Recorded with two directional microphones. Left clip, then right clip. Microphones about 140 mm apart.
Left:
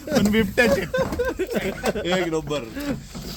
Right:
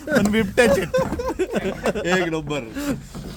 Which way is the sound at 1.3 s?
25° right (ahead or behind).